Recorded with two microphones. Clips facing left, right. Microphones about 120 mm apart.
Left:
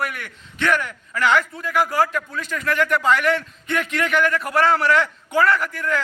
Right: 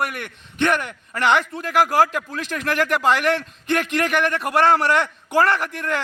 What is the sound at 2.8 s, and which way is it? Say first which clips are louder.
A man's voice: even; 70° right (ahead or behind).